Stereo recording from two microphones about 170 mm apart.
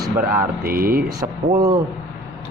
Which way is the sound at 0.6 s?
60° right (ahead or behind).